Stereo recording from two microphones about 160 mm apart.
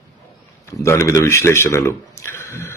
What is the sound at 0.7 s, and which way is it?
A man's voice, 20° left (ahead or behind).